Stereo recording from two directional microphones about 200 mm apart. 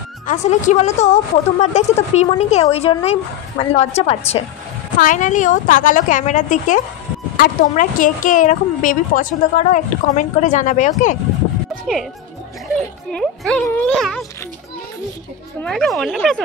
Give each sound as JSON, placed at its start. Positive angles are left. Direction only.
{"t": 0.3, "sound": "speech", "side_deg": 35}
{"t": 5.0, "sound": "speech", "side_deg": 40}
{"t": 11.9, "sound": "speech", "side_deg": 0}
{"t": 13.1, "sound": "speech", "side_deg": 0}
{"t": 15.6, "sound": "speech", "side_deg": 5}